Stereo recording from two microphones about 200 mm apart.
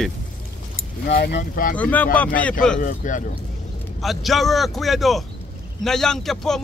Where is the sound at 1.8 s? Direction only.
10° left (ahead or behind).